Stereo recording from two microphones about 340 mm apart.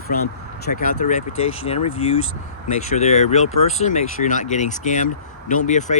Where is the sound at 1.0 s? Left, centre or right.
Left.